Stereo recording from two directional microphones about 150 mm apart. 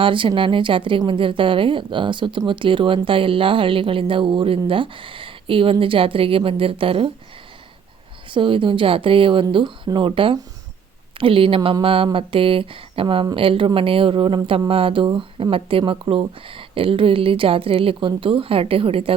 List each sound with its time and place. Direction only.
0.0 s speech: 35° right (ahead or behind)
8.3 s speech: 35° right (ahead or behind)